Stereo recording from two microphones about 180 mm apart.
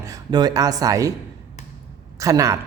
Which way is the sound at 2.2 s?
20° right (ahead or behind).